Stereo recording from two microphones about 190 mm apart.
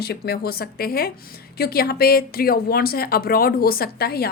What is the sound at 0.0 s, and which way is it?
Speech, 55° left (ahead or behind).